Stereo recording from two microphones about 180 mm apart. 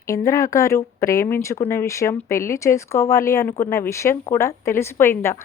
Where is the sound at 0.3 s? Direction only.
15° left (ahead or behind).